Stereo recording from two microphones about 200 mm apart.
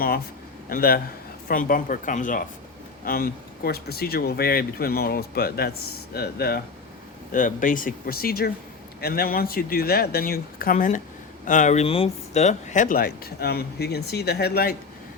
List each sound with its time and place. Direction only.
0.7 s speech: 50° left (ahead or behind)
7.3 s speech: 40° left (ahead or behind)